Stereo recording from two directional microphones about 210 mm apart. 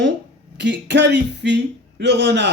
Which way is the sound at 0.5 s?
55° right (ahead or behind).